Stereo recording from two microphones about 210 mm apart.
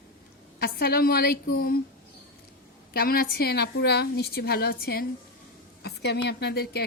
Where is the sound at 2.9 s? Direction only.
45° left (ahead or behind).